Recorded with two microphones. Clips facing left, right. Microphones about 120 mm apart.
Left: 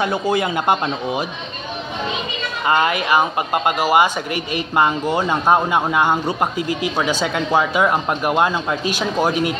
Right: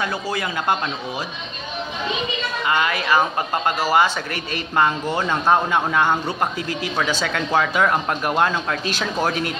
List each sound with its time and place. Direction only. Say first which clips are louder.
0.3 s speech: left 5 dB; 20° left (ahead or behind)
2.6 s a woman's voice: left 4 dB; 35° left (ahead or behind)
2.9 s speech: left 2 dB; 15° left (ahead or behind)